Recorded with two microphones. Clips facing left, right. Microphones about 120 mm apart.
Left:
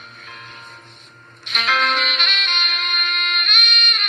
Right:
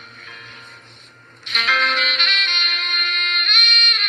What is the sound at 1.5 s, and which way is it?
Music, 15° left (ahead or behind).